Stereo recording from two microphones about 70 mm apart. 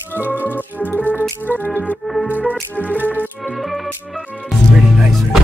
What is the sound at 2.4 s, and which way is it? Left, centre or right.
Music, left.